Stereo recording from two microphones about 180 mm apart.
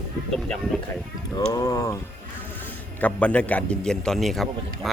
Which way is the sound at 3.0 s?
5° left (ahead or behind).